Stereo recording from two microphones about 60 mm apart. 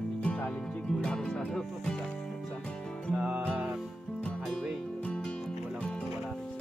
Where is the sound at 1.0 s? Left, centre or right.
Centre.